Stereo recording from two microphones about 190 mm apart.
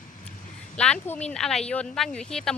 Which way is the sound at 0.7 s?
5° left (ahead or behind).